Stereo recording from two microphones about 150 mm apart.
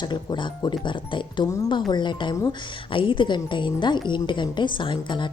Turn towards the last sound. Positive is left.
turn(degrees=30)  # may be behind; listen again after turning